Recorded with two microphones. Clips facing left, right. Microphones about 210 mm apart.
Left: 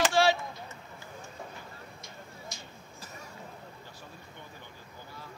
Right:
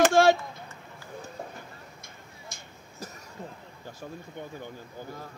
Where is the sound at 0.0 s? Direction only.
50° right (ahead or behind).